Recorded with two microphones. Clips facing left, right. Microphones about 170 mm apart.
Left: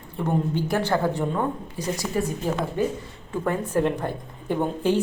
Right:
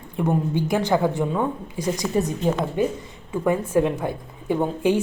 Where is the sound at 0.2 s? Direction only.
15° right (ahead or behind).